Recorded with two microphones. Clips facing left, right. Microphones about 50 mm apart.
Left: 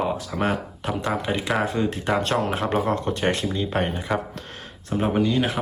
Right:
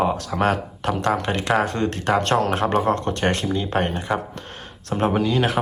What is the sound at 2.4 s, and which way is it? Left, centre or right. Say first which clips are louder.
Speech: right 3 dB; right.